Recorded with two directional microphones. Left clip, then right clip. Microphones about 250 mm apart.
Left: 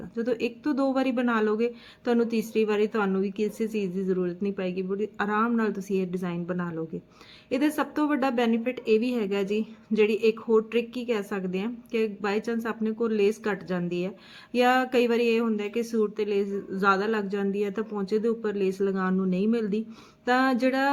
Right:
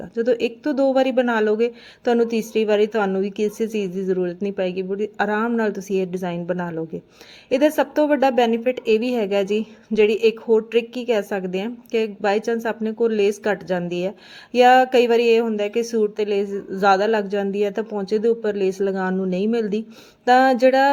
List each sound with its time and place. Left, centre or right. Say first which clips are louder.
0.2 s speech: right 8 dB; centre